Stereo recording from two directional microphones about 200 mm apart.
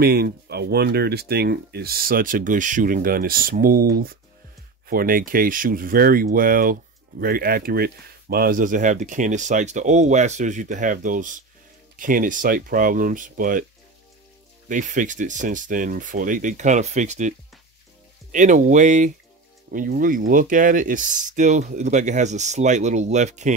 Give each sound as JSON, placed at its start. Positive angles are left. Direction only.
{"t": 0.0, "sound": "speech", "side_deg": -50}
{"t": 14.7, "sound": "speech", "side_deg": -40}